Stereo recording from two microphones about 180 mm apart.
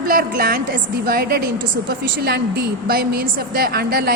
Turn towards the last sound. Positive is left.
turn(degrees=-60)  # may be behind; listen again after turning